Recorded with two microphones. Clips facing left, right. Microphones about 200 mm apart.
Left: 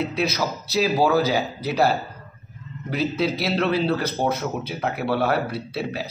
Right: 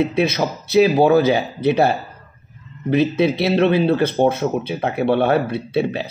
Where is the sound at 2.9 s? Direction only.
20° right (ahead or behind).